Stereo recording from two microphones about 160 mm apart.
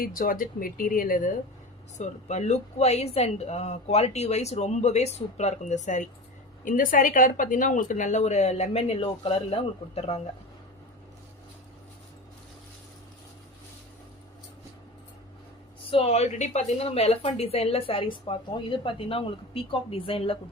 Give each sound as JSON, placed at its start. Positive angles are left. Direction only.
{"t": 0.0, "sound": "speech", "side_deg": 60}
{"t": 2.0, "sound": "speech", "side_deg": 45}
{"t": 15.9, "sound": "a woman's voice", "side_deg": 40}